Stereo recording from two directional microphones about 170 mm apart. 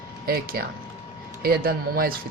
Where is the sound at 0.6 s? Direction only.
65° right (ahead or behind).